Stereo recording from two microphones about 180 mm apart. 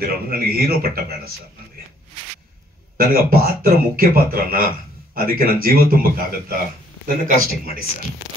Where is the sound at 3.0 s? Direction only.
55° right (ahead or behind).